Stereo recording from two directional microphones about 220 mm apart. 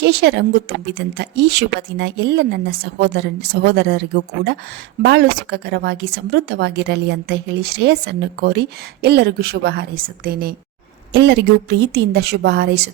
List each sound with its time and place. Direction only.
0.0 s a woman's voice: 50° right (ahead or behind)